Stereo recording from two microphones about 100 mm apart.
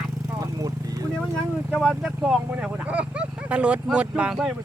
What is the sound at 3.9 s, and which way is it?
Speech, 10° right (ahead or behind).